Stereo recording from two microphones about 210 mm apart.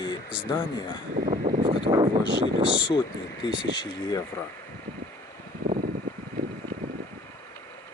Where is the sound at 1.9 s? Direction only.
20° right (ahead or behind).